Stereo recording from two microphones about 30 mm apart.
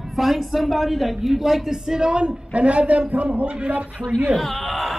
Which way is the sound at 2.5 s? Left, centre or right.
Right.